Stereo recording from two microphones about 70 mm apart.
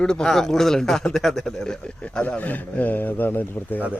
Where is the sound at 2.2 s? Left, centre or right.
Left.